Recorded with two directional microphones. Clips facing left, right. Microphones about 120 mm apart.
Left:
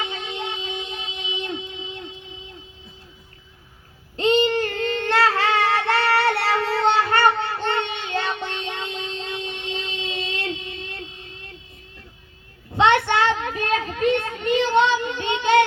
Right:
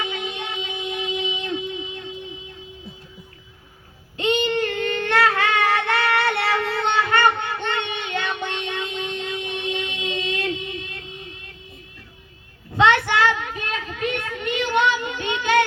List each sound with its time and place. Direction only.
0.0 s music: 25° left (ahead or behind)
4.2 s child singing: 35° left (ahead or behind)
12.7 s child singing: 20° left (ahead or behind)